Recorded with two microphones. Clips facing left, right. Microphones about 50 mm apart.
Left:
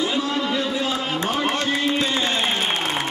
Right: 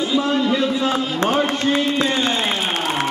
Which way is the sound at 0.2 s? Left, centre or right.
Right.